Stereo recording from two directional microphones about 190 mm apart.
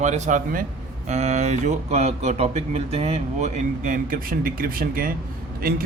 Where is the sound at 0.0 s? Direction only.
40° right (ahead or behind).